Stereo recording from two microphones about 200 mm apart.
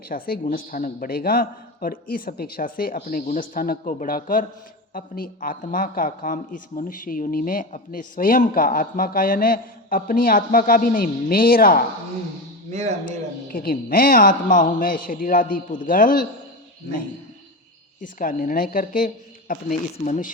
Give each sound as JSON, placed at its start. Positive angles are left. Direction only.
{"t": 0.1, "sound": "speech", "side_deg": 45}
{"t": 13.5, "sound": "speech", "side_deg": 45}
{"t": 18.0, "sound": "speech", "side_deg": 45}